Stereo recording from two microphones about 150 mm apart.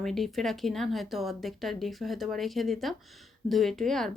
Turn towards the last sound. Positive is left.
turn(degrees=0)  # may be behind; listen again after turning